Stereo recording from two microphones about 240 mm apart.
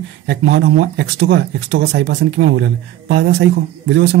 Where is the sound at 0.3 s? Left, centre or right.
Right.